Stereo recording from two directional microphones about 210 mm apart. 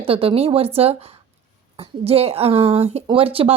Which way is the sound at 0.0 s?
25° right (ahead or behind).